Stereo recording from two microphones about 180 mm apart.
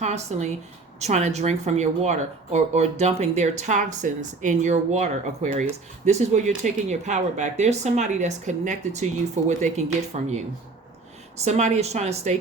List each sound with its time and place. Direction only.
0.0 s speech: 40° right (ahead or behind)
11.3 s speech: 40° right (ahead or behind)